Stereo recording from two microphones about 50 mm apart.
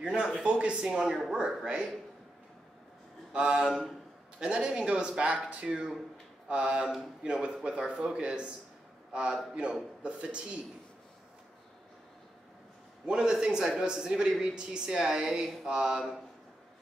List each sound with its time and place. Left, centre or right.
0.0 s speech: right
0.8 s a man's voice: centre
3.3 s a man's voice: centre
13.0 s a man's voice: centre